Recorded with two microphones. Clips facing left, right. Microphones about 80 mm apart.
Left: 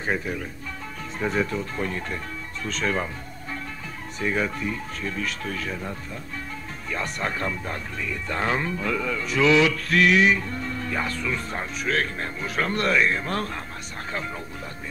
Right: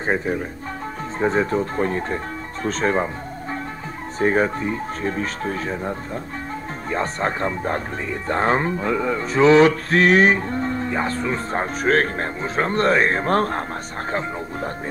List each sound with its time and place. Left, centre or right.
0.0 s speech: right
4.2 s speech: right